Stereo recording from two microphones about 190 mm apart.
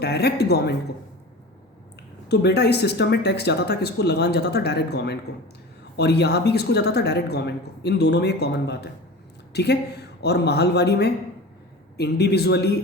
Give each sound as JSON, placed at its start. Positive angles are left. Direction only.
{"t": 0.0, "sound": "speech", "side_deg": 60}
{"t": 2.3, "sound": "a woman's voice", "side_deg": 60}